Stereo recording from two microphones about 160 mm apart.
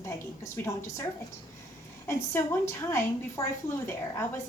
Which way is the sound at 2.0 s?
15° left (ahead or behind).